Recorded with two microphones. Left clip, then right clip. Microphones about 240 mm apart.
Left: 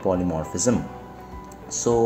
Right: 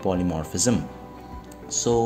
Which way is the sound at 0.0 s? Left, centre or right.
Right.